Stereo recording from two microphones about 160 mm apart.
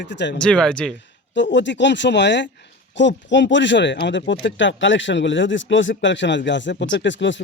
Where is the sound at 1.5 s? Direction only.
90° left.